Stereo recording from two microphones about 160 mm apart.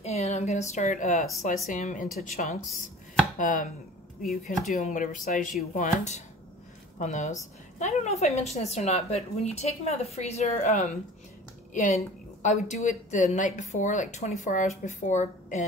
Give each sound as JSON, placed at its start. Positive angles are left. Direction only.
{"t": 0.0, "sound": "speech", "side_deg": 40}
{"t": 3.3, "sound": "chopping", "side_deg": 55}
{"t": 4.2, "sound": "speech", "side_deg": 55}